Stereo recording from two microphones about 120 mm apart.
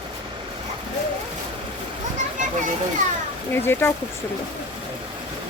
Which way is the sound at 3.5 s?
20° left (ahead or behind).